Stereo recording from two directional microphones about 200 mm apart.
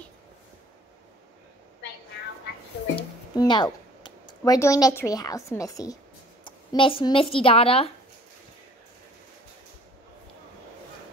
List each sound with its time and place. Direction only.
3.3 s speech: 20° left (ahead or behind)